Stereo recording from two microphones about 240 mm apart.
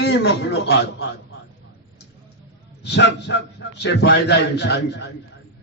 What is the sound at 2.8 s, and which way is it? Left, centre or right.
A man's voice, left.